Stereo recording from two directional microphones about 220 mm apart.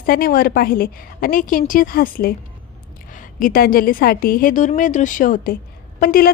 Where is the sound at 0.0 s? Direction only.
40° left (ahead or behind).